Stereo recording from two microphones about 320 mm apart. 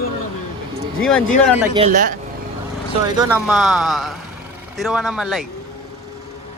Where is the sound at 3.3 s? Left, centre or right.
Centre.